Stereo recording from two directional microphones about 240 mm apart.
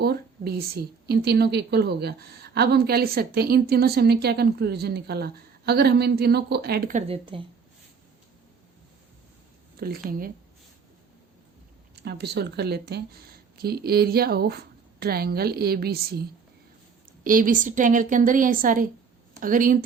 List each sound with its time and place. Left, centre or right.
0.0 s a woman's voice: right
7.1 s speech: right
9.8 s a woman's voice: right
12.0 s a woman's voice: right
17.2 s a woman's voice: right